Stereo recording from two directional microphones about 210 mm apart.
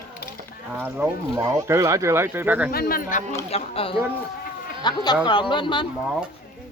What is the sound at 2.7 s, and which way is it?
Speech, 45° left (ahead or behind).